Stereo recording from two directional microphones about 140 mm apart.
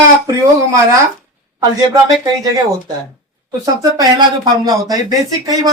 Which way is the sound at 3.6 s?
25° right (ahead or behind).